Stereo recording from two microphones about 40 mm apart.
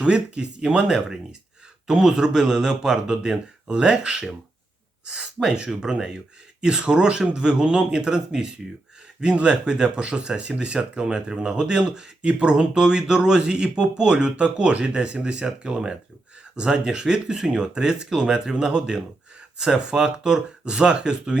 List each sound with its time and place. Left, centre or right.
0.0 s speech: right
0.9 s speech: centre